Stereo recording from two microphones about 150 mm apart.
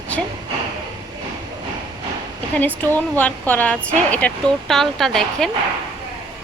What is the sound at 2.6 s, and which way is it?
Speech, 10° left (ahead or behind).